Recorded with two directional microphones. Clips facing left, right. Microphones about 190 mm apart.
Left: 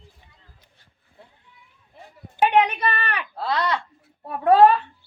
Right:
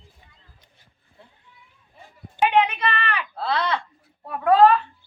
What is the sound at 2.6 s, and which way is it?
Speech, 40° left (ahead or behind).